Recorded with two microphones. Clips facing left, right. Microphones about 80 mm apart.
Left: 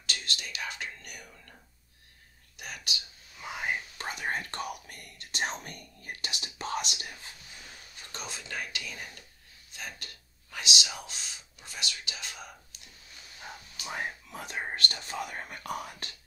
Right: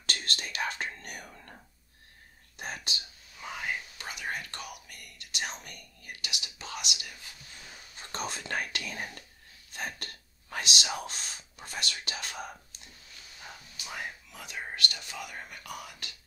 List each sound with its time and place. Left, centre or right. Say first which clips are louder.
0.0 s whispering: right 2 dB; right
2.5 s speech: right 2 dB; right
3.4 s whispering: even; centre
4.0 s whispering: left 3 dB; left
8.1 s speech: right 5 dB; right
13.8 s speech: left 4 dB; left